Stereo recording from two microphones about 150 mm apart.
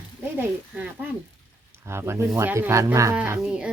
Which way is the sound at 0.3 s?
10° right (ahead or behind).